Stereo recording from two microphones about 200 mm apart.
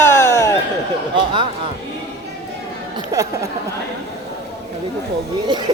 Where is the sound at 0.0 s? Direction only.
10° left (ahead or behind).